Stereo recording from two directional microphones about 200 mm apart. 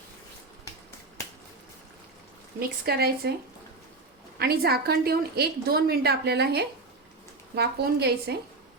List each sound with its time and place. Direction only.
2.6 s a woman's voice: 50° right (ahead or behind)
4.4 s a woman's voice: 50° right (ahead or behind)